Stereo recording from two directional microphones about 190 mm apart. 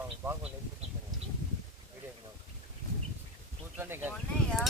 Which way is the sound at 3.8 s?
10° right (ahead or behind).